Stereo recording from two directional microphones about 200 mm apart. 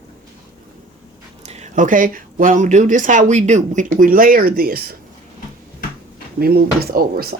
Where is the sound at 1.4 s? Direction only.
35° right (ahead or behind); by 4.9 s 50° right (ahead or behind).